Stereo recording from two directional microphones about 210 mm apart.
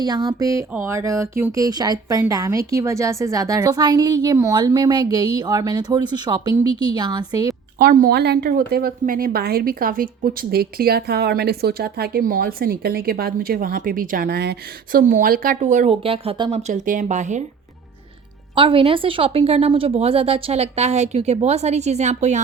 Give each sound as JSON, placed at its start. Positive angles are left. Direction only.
{"t": 0.0, "sound": "speech", "side_deg": -20}
{"t": 7.8, "sound": "a woman's voice", "side_deg": -45}
{"t": 18.5, "sound": "speech", "side_deg": -25}